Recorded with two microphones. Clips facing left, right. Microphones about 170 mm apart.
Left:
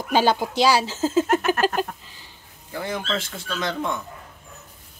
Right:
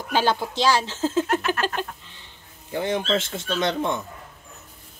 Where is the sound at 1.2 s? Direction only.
45° left (ahead or behind).